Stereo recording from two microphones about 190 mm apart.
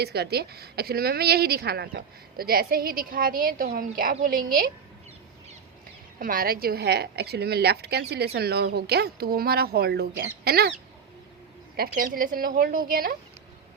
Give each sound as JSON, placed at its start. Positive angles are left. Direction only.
{"t": 0.0, "sound": "a woman's voice", "side_deg": -60}
{"t": 6.1, "sound": "a woman's voice", "side_deg": -50}
{"t": 11.8, "sound": "a woman's voice", "side_deg": -50}